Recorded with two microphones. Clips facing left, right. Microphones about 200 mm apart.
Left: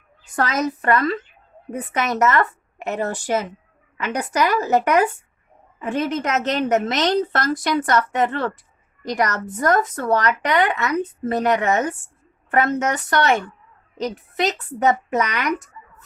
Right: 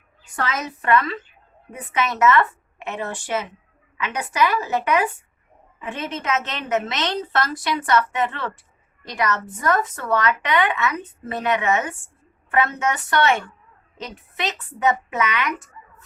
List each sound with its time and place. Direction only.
0.3 s a woman's voice: 40° left (ahead or behind)